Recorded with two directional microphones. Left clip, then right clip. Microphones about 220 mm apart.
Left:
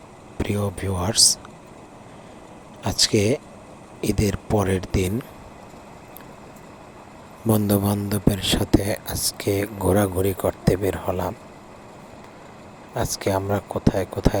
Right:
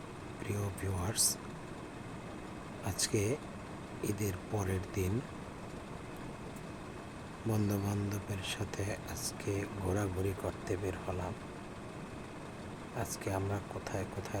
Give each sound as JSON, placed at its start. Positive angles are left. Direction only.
{"t": 0.4, "sound": "speech", "side_deg": 35}
{"t": 2.8, "sound": "speech", "side_deg": 40}
{"t": 7.5, "sound": "speech", "side_deg": 40}
{"t": 13.0, "sound": "speech", "side_deg": 40}